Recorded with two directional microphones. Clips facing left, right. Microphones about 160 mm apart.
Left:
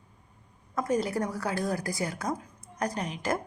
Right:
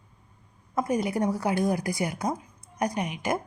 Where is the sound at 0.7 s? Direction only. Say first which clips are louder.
Right 2 dB; 20° right (ahead or behind).